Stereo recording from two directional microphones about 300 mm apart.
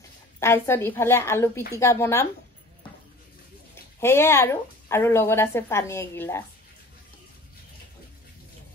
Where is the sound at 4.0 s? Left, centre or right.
Centre.